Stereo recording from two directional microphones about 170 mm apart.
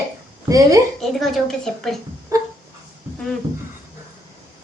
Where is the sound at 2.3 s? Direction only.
20° right (ahead or behind).